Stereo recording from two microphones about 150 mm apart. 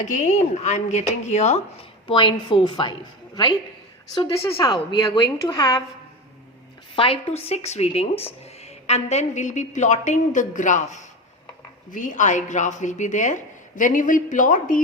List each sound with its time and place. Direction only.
0.0 s speech: 55° left (ahead or behind); by 2.9 s 30° left (ahead or behind)
4.1 s speech: 35° left (ahead or behind)
6.9 s speech: 35° left (ahead or behind); by 14.8 s 60° left (ahead or behind)